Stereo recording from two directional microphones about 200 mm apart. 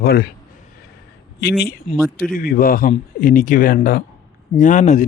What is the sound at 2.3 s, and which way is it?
A man's voice, 45° left (ahead or behind).